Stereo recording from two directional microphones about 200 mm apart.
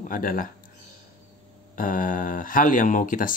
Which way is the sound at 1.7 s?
45° left (ahead or behind).